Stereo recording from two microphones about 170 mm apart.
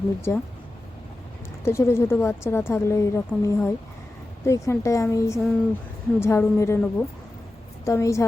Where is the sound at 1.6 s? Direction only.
15° left (ahead or behind).